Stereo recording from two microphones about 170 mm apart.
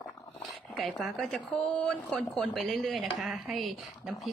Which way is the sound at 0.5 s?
Centre (ahead or behind).